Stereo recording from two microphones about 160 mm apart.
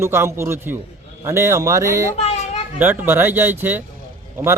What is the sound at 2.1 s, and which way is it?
Children playing, 45° left (ahead or behind).